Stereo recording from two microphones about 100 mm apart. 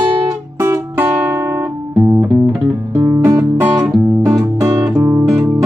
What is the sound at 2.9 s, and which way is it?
Music, 30° right (ahead or behind).